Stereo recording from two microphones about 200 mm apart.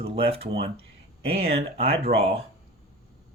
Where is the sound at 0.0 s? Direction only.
30° right (ahead or behind).